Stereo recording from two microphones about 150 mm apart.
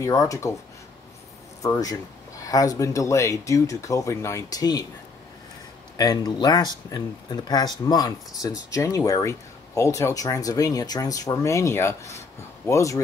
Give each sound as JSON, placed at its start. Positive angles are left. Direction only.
{"t": 0.0, "sound": "speech", "side_deg": 20}
{"t": 1.6, "sound": "speech", "side_deg": 25}
{"t": 5.9, "sound": "speech", "side_deg": 25}